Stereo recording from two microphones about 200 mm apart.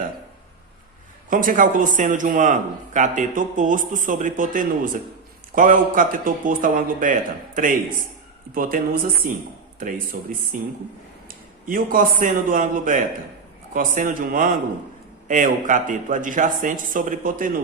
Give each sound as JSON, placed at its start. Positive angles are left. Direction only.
{"t": 1.3, "sound": "a man's voice", "side_deg": -45}